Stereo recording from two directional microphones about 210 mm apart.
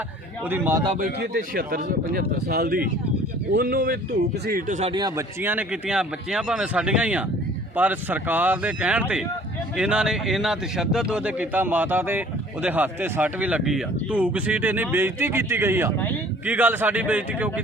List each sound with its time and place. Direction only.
0.4 s a man's voice: 10° right (ahead or behind)
0.9 s speech: 40° right (ahead or behind)
4.9 s a man's voice: 20° right (ahead or behind)